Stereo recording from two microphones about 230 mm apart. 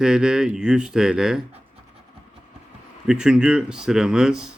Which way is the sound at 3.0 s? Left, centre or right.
Centre.